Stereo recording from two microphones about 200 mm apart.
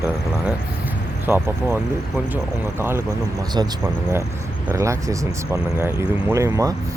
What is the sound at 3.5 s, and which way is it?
Speech, 15° right (ahead or behind).